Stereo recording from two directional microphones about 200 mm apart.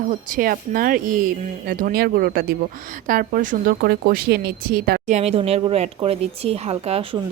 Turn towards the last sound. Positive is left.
turn(degrees=-30)  # may be behind; listen again after turning